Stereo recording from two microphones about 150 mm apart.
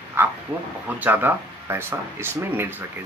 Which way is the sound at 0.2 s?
15° right (ahead or behind).